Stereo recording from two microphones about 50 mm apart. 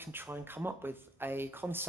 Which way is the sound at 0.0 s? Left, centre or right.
Right.